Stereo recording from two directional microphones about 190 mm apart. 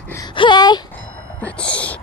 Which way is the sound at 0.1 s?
20° left (ahead or behind).